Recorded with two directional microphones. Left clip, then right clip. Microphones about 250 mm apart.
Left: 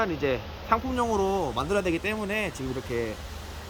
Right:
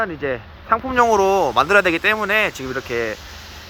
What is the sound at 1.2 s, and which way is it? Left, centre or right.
Speech, right.